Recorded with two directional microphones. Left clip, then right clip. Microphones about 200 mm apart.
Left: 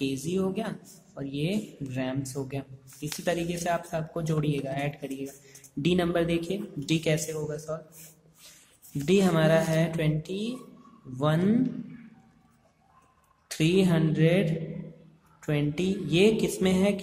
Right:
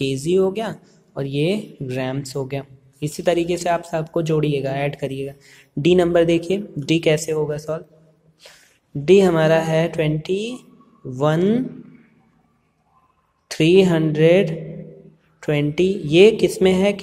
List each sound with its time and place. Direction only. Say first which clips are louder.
0.0 s speech: right 11 dB; 20° right (ahead or behind)
9.0 s speech: right 10 dB; 15° right (ahead or behind)
13.5 s speech: right 11 dB; 15° right (ahead or behind)